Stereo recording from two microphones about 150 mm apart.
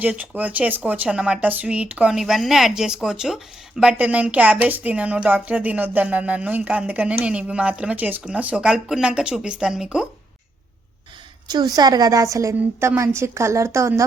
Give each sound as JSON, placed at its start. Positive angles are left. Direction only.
{"t": 0.0, "sound": "speech", "side_deg": -10}
{"t": 11.4, "sound": "a woman's voice", "side_deg": -25}